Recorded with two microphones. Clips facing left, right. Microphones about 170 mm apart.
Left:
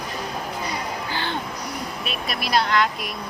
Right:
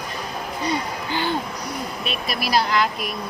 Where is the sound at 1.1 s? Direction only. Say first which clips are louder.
Right 7 dB; 15° right (ahead or behind).